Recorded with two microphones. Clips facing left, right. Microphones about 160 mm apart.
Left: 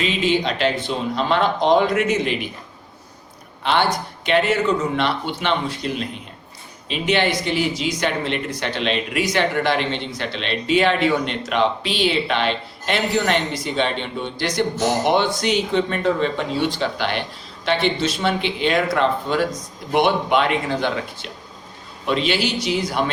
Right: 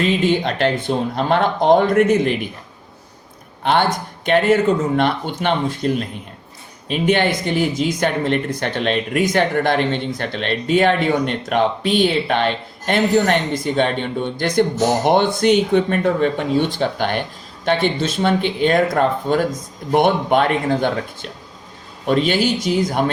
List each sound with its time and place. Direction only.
0.0 s speech: 50° right (ahead or behind)
3.6 s speech: 50° right (ahead or behind)